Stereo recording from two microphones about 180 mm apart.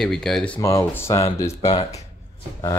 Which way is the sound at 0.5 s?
15° left (ahead or behind).